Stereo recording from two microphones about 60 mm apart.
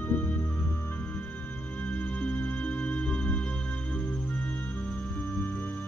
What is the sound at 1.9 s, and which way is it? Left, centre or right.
Music, left.